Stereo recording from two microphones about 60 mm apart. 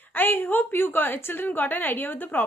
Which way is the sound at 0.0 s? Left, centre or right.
Left.